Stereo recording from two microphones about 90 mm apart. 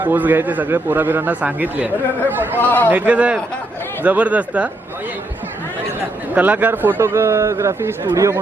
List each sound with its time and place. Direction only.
0.0 s a man's voice: 20° right (ahead or behind)
2.6 s a man's voice: 20° left (ahead or behind)
2.9 s speech: 15° right (ahead or behind)
6.3 s a man's voice: 20° right (ahead or behind); by 8.4 s 35° right (ahead or behind)